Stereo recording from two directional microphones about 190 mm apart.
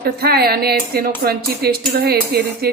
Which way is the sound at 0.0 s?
55° right (ahead or behind).